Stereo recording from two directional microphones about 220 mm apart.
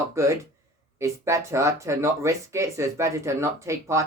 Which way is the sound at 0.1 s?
15° right (ahead or behind).